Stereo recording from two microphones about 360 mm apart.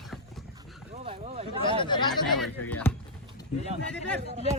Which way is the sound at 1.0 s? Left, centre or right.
Centre.